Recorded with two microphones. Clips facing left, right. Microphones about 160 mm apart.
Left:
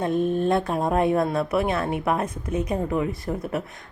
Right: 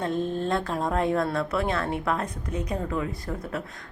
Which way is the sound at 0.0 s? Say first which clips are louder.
Left 5 dB; 15° left (ahead or behind).